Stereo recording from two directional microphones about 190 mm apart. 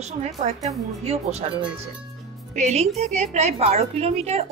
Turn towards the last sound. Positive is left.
turn(degrees=-35)  # may be behind; listen again after turning